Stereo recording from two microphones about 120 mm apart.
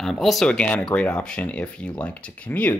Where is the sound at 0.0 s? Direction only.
Centre (ahead or behind).